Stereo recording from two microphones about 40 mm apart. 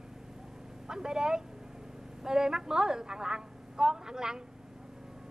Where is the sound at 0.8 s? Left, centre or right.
Centre.